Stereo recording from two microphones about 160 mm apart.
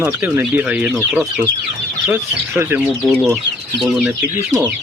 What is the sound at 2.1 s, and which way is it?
Speech, 15° right (ahead or behind).